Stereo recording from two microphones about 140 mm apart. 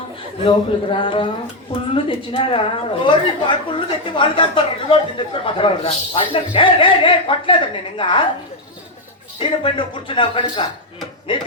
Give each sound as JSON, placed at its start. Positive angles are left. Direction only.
{"t": 0.4, "sound": "a woman's voice", "side_deg": 35}
{"t": 9.6, "sound": "a woman's voice", "side_deg": 35}